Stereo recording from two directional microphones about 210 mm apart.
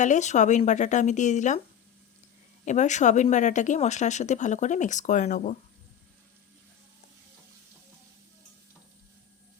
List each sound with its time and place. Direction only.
0.0 s speech: 35° left (ahead or behind)
2.6 s speech: 35° left (ahead or behind)